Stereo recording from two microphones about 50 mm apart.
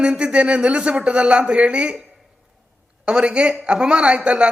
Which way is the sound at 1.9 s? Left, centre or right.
Centre.